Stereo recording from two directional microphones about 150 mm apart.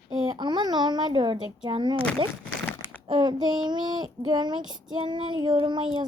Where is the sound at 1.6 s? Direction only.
30° right (ahead or behind).